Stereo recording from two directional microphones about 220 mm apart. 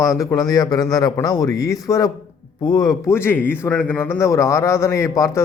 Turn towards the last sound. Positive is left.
turn(degrees=15)  # may be behind; listen again after turning